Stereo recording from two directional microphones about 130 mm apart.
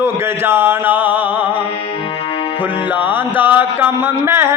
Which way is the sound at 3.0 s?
15° right (ahead or behind).